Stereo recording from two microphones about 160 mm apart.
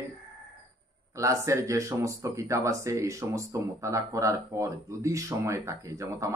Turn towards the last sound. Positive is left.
turn(degrees=-20)  # may be behind; listen again after turning